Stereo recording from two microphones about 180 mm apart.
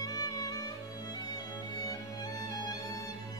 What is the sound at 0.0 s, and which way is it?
Music, 20° left (ahead or behind).